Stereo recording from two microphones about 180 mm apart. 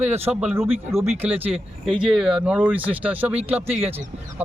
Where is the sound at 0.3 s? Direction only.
10° right (ahead or behind).